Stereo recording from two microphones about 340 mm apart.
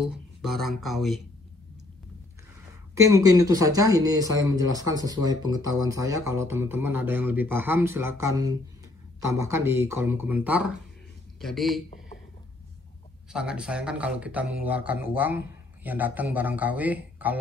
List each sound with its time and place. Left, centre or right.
0.0 s speech: centre
3.1 s speech: centre
13.3 s speech: centre